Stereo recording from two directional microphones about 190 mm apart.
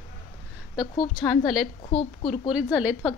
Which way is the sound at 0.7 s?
20° left (ahead or behind).